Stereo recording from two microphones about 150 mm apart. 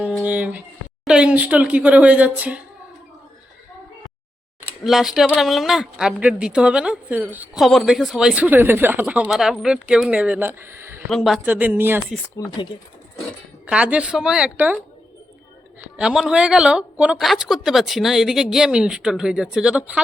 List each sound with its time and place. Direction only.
0.2 s a sound: 10° right (ahead or behind)
1.0 s speech: 5° right (ahead or behind)
4.8 s speech: centre (ahead or behind)
7.6 s speech: centre (ahead or behind); by 11.0 s 15° right (ahead or behind)
11.1 s speech: centre (ahead or behind)
11.4 s speech: 10° right (ahead or behind)
12.4 s speech: 25° left (ahead or behind)
13.7 s speech: 10° right (ahead or behind)
16.0 s speech: 5° right (ahead or behind)